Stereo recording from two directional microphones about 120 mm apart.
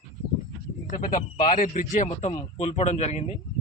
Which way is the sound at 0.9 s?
90° left.